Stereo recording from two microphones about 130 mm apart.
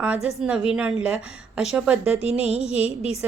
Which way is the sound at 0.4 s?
5° right (ahead or behind).